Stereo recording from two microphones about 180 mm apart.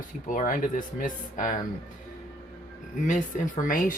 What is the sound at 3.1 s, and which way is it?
Speech, 45° left (ahead or behind).